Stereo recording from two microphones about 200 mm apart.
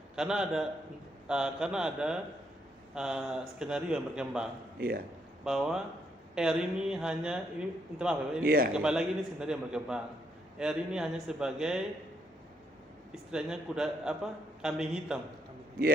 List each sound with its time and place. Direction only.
0.2 s speech: 5° right (ahead or behind)
4.8 s speech: 50° right (ahead or behind)
5.5 s speech: 5° right (ahead or behind)
8.4 s speech: 45° right (ahead or behind)
8.7 s speech: 5° right (ahead or behind)
13.3 s speech: 5° right (ahead or behind)